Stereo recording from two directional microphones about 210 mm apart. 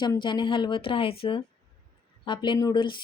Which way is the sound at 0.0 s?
20° left (ahead or behind).